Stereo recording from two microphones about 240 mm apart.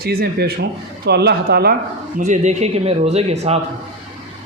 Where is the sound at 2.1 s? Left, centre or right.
Right.